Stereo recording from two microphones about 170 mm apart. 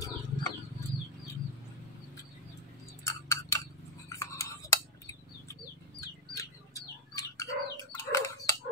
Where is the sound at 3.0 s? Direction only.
15° left (ahead or behind).